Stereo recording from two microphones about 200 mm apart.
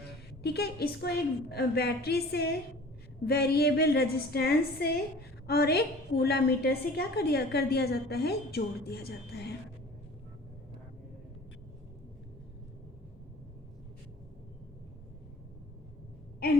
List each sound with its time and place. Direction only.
0.4 s a woman's voice: 55° left (ahead or behind)